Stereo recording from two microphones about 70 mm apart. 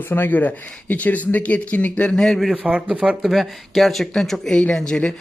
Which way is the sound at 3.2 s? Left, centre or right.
Centre.